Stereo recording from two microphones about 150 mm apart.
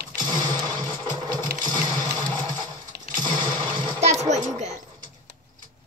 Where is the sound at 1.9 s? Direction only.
25° right (ahead or behind).